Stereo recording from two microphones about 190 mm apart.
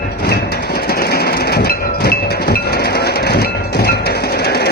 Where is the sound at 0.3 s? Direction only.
55° left (ahead or behind).